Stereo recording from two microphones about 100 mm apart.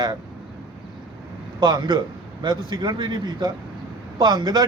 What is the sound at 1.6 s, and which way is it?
A man's voice, 45° right (ahead or behind).